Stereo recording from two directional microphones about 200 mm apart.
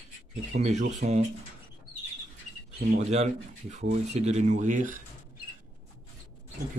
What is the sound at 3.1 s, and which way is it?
Speech, 35° right (ahead or behind).